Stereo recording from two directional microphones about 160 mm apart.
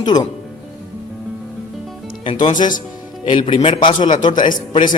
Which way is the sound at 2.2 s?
30° left (ahead or behind).